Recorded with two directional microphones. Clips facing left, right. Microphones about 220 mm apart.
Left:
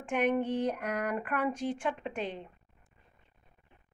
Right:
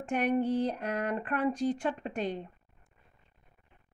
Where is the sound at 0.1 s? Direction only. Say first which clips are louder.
Right 1 dB; 35° right (ahead or behind).